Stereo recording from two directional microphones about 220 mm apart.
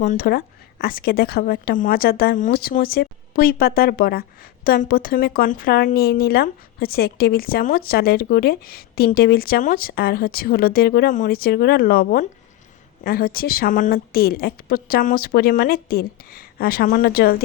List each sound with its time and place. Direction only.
0.0 s a woman's voice: 40° left (ahead or behind)